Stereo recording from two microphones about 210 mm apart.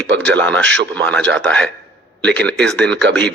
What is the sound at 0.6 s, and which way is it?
Speech, 55° right (ahead or behind).